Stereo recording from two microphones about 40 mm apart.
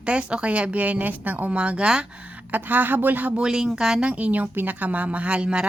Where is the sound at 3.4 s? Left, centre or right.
Right.